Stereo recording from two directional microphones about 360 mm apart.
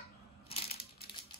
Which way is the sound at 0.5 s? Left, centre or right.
Centre.